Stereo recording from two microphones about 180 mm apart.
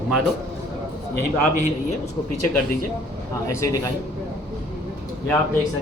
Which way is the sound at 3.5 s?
15° left (ahead or behind).